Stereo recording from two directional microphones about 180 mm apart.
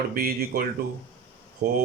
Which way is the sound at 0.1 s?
55° right (ahead or behind).